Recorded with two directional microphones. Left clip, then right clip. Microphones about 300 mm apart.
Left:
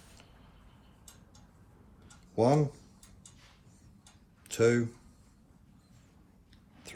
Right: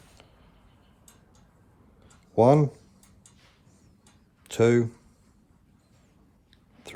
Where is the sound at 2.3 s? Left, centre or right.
Right.